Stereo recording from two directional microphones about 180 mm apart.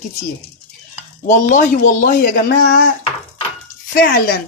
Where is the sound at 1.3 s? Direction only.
45° left (ahead or behind).